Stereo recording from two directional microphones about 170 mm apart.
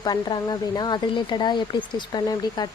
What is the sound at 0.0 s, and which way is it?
Speech, 25° left (ahead or behind).